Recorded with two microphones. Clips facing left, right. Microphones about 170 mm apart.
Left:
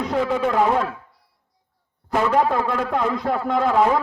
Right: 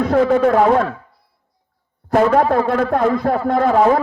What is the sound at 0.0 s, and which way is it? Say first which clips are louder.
Speech: right 7 dB; 50° right (ahead or behind).